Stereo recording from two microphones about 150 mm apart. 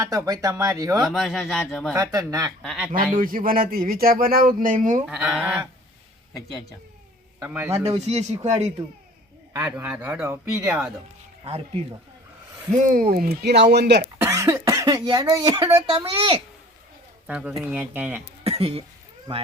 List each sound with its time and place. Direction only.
0.0 s speech: 20° right (ahead or behind)
1.0 s speech: centre (ahead or behind)
2.1 s speech: 25° right (ahead or behind)
2.6 s speech: 5° right (ahead or behind)
2.9 s speech: 65° right (ahead or behind)
5.0 s speech: 5° right (ahead or behind)
7.3 s a man's voice: 10° right (ahead or behind)
7.7 s speech: 45° right (ahead or behind)
9.5 s speech: 10° right (ahead or behind)
11.4 s speech: 45° right (ahead or behind)
12.7 s speech: 60° right (ahead or behind); by 14.1 s 90° right
14.2 s speech: 20° right (ahead or behind); by 16.4 s 40° right (ahead or behind)
17.2 s speech: 5° right (ahead or behind)
18.4 s cough: 40° right (ahead or behind)